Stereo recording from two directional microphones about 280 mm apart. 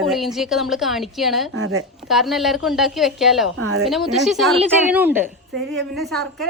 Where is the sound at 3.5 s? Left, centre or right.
Right.